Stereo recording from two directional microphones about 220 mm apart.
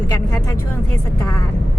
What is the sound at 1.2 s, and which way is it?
Speech, 15° left (ahead or behind).